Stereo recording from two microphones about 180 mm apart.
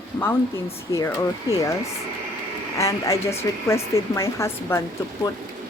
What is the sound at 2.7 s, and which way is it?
A woman's voice, 15° left (ahead or behind).